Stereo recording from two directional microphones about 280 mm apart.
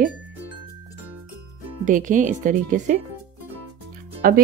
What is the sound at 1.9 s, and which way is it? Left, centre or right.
Speech, right.